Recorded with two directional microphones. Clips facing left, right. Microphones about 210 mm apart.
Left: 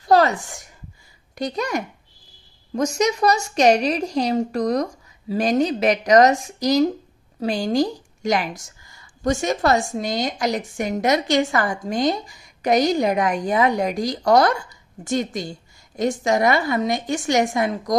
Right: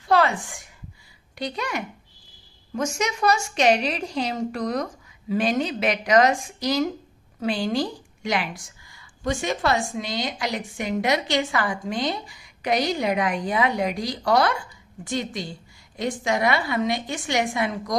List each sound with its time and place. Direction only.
0.0 s a woman's voice: 40° left (ahead or behind)